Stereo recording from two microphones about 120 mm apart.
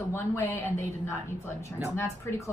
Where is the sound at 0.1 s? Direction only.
20° left (ahead or behind).